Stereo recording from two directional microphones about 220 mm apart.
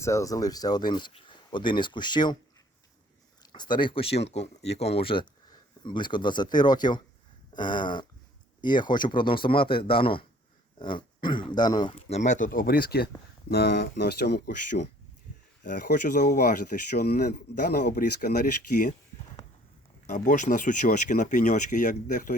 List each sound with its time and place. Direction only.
0.0 s speech: 15° left (ahead or behind)
3.4 s speech: 20° left (ahead or behind); by 14.5 s 45° left (ahead or behind)
15.7 s speech: 35° left (ahead or behind)
20.1 s speech: 35° left (ahead or behind)